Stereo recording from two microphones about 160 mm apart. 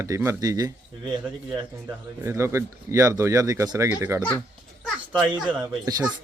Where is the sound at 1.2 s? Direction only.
10° right (ahead or behind).